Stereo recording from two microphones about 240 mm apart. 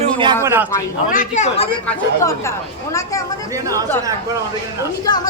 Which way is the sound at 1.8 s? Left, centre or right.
Centre.